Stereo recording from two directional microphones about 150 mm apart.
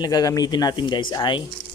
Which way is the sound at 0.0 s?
25° left (ahead or behind).